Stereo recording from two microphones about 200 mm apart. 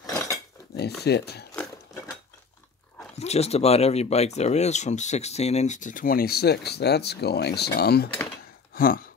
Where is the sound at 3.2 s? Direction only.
30° left (ahead or behind); by 8.1 s 50° left (ahead or behind).